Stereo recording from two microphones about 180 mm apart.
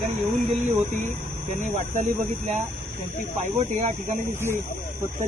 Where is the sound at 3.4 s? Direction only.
40° right (ahead or behind).